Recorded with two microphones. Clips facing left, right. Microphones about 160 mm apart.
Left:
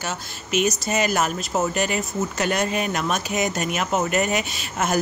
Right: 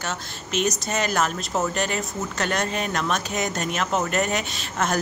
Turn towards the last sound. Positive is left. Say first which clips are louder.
# left 1 dB
turn(degrees=10)  # may be behind; listen again after turning